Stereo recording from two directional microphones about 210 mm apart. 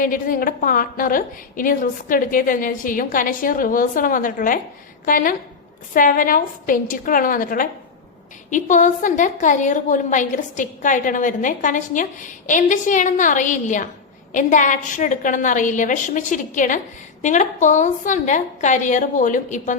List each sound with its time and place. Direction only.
0.0 s a woman's voice: 40° left (ahead or behind)